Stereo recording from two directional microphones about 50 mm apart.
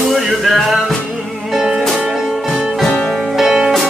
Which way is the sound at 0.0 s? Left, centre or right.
Centre.